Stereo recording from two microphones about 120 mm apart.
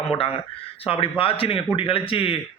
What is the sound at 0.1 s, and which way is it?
Speech, 50° left (ahead or behind).